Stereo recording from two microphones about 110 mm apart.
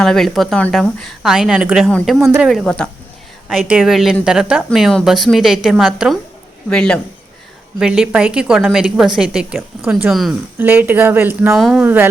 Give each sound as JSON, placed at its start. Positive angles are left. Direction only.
{"t": 0.0, "sound": "speech", "side_deg": 5}
{"t": 3.5, "sound": "a man's voice", "side_deg": -5}
{"t": 7.8, "sound": "a woman's voice", "side_deg": -5}
{"t": 10.6, "sound": "speech", "side_deg": -15}
{"t": 11.5, "sound": "speech", "side_deg": 0}
{"t": 11.8, "sound": "a woman's voice", "side_deg": -15}